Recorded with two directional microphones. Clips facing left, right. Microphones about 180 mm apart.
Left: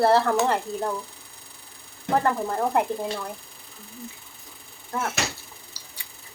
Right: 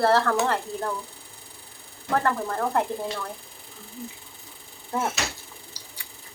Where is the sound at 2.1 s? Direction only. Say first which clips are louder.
Left 1 dB; 15° left (ahead or behind).